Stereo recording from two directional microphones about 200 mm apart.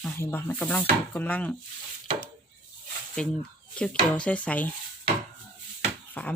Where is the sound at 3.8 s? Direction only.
5° left (ahead or behind).